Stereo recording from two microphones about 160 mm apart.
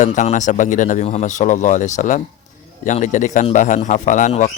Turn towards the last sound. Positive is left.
turn(degrees=50)  # may be behind; listen again after turning